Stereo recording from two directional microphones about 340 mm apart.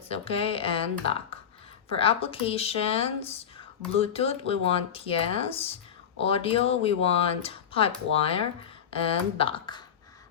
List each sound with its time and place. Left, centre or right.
0.1 s speech: centre